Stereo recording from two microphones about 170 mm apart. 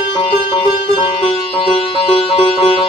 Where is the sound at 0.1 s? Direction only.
25° left (ahead or behind).